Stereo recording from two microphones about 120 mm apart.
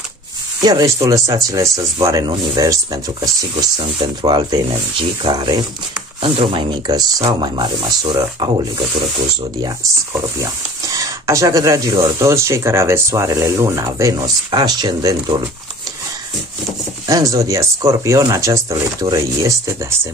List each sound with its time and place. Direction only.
0.6 s speech: 30° right (ahead or behind)
6.9 s speech: 30° right (ahead or behind)
10.1 s speech: 25° right (ahead or behind)
17.1 s speech: 30° right (ahead or behind)